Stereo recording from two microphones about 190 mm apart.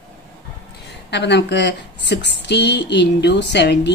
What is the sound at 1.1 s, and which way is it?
Speech, 65° left (ahead or behind).